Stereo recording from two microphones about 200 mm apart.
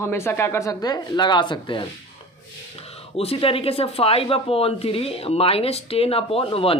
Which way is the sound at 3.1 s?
30° left (ahead or behind).